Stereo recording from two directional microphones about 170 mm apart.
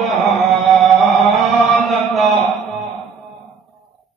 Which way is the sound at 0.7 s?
Centre (ahead or behind).